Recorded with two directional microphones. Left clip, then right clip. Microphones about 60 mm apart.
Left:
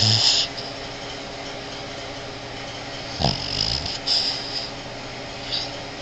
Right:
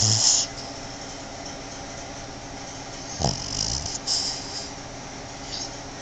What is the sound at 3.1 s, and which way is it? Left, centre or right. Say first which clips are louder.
Dog: left 4 dB; right.